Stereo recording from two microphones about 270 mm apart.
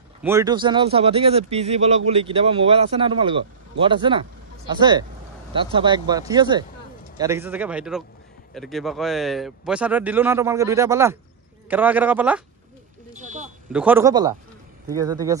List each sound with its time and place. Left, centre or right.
0.2 s a man's voice: centre
13.7 s speech: centre